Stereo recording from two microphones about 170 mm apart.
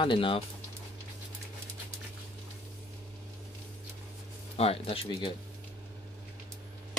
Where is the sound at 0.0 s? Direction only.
30° left (ahead or behind).